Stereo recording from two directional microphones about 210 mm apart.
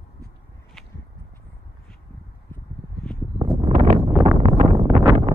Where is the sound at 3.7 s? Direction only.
35° right (ahead or behind).